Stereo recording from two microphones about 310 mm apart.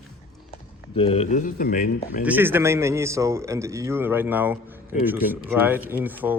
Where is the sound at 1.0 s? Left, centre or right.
Centre.